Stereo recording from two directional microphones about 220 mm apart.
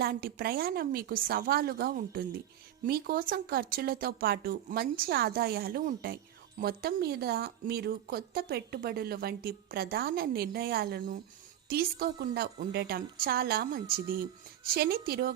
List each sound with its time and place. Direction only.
0.0 s a woman's voice: 45° right (ahead or behind)